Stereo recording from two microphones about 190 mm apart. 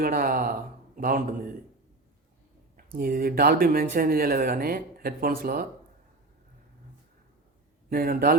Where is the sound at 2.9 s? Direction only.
50° right (ahead or behind).